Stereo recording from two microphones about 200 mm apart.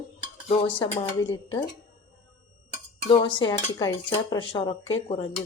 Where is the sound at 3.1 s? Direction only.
25° left (ahead or behind).